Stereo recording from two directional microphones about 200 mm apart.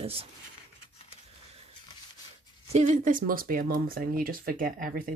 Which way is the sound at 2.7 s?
40° right (ahead or behind).